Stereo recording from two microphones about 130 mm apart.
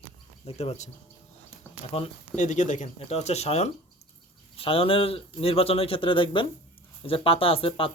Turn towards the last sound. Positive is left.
turn(degrees=45)  # may be behind; listen again after turning